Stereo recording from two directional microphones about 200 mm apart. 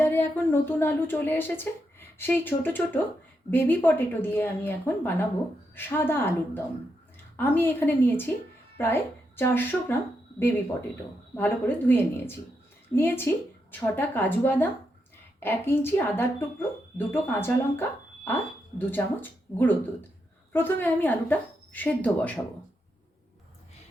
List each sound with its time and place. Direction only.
0.0 s speech: 10° left (ahead or behind)
11.3 s speech: 10° left (ahead or behind)